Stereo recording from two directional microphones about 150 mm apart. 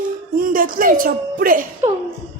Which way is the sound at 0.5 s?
65° right (ahead or behind).